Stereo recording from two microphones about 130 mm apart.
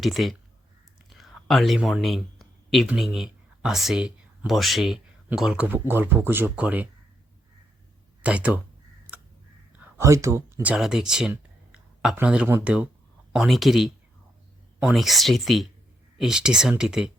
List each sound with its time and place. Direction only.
0.0 s speech: centre (ahead or behind)
1.1 s a sound: centre (ahead or behind)
2.8 s speech: 5° right (ahead or behind)
8.2 s speech: 10° right (ahead or behind)
10.0 s speech: 25° right (ahead or behind)
10.6 s speech: 10° right (ahead or behind)
13.3 s speech: centre (ahead or behind)
14.9 s speech: centre (ahead or behind)